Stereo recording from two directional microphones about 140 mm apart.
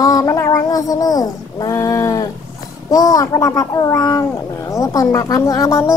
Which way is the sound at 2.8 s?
25° left (ahead or behind).